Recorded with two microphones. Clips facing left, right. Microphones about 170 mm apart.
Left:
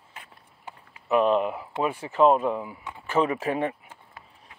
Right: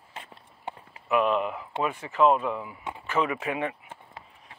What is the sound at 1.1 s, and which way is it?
Speech, 35° left (ahead or behind).